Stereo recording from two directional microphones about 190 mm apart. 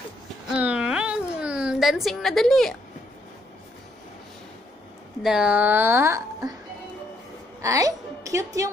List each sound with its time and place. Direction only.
0.5 s a sound: 5° right (ahead or behind)
5.2 s a woman's voice: 5° right (ahead or behind)
7.6 s speech: 15° right (ahead or behind)